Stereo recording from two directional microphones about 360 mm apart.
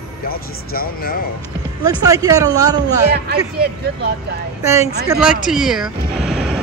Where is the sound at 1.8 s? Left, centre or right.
Centre.